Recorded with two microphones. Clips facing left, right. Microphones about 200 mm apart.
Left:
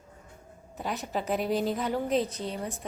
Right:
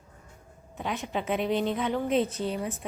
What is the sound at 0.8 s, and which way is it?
A woman's voice, centre (ahead or behind).